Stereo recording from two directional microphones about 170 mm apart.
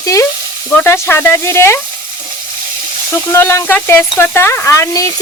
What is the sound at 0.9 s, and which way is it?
Speech, 15° left (ahead or behind).